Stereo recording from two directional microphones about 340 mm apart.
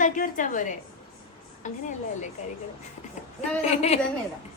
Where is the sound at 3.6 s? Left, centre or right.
Centre.